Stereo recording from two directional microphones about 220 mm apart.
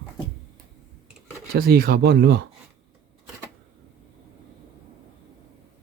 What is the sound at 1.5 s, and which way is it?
Speech, 45° right (ahead or behind).